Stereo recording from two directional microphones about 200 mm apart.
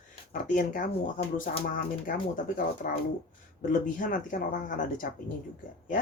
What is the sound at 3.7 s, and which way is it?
Speech, 40° left (ahead or behind).